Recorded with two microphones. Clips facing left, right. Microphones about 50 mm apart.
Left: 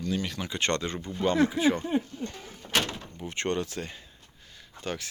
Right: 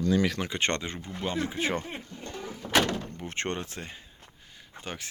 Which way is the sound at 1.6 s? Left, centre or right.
Right.